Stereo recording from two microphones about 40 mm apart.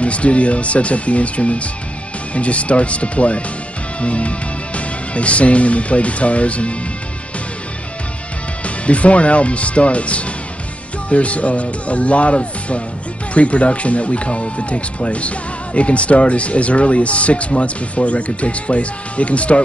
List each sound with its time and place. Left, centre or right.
0.0 s speech: left
8.6 s speech: left